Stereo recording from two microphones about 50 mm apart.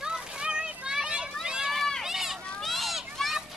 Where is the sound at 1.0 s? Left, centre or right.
Centre.